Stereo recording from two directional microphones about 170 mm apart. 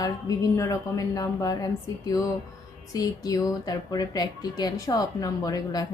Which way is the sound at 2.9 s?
20° left (ahead or behind).